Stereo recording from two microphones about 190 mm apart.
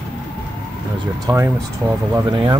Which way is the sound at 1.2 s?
15° right (ahead or behind).